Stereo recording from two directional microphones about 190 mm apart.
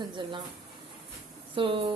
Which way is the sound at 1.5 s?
25° right (ahead or behind).